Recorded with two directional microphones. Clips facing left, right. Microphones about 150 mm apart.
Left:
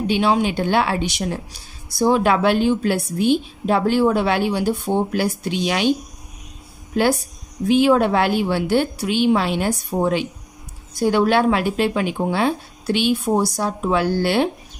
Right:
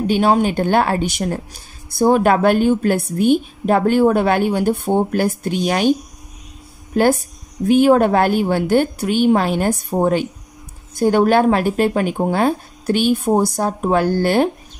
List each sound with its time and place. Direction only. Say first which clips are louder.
0.0 s speech: right 3 dB; 45° right (ahead or behind)
7.6 s speech: right 3 dB; 50° right (ahead or behind)